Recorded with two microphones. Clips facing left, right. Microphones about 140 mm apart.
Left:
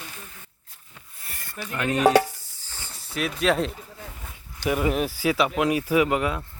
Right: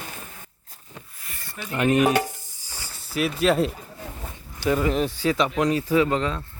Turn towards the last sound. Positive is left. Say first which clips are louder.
# even
turn(degrees=10)  # may be behind; listen again after turning